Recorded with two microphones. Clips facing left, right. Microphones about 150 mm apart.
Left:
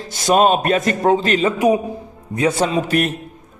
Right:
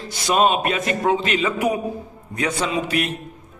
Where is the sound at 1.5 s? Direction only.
20° left (ahead or behind).